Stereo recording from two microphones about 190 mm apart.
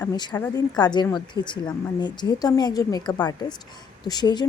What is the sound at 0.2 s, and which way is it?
A woman's voice, 20° left (ahead or behind).